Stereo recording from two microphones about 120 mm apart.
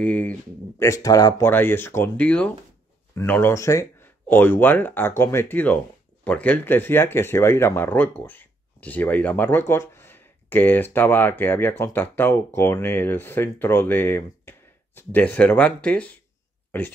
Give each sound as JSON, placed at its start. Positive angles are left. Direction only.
{"t": 0.0, "sound": "speech", "side_deg": 10}
{"t": 0.8, "sound": "speech", "side_deg": 30}
{"t": 1.5, "sound": "speech", "side_deg": 20}